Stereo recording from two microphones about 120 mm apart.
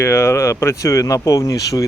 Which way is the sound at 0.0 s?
20° left (ahead or behind).